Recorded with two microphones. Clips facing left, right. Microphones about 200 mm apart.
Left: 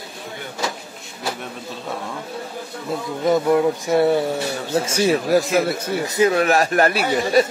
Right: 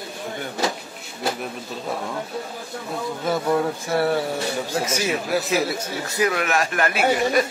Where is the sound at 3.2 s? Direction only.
20° left (ahead or behind).